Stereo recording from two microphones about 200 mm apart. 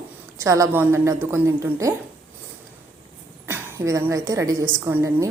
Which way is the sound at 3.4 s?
10° right (ahead or behind).